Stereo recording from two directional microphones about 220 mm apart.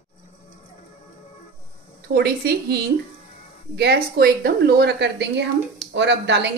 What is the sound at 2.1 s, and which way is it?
A woman's voice, 45° right (ahead or behind).